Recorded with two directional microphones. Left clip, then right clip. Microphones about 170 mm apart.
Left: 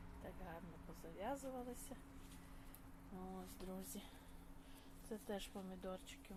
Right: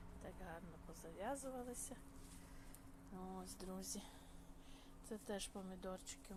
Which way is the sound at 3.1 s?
5° right (ahead or behind).